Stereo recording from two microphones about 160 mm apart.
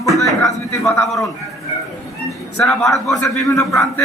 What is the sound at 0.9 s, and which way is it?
Speech, centre (ahead or behind).